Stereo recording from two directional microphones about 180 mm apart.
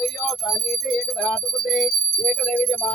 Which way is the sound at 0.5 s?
Centre (ahead or behind).